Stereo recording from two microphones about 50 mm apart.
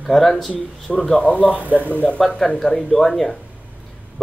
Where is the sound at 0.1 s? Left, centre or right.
Centre.